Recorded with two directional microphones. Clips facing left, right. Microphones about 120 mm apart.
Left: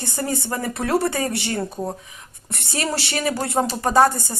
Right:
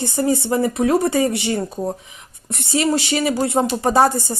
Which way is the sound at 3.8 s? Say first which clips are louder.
Even; 15° right (ahead or behind).